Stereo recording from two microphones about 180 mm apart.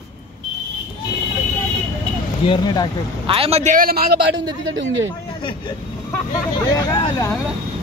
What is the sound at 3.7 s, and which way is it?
Speech, 55° right (ahead or behind).